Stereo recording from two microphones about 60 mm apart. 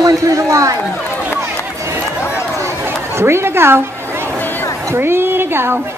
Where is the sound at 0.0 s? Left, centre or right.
Right.